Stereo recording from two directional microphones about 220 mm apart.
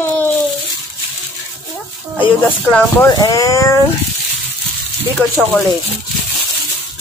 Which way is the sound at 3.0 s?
15° left (ahead or behind).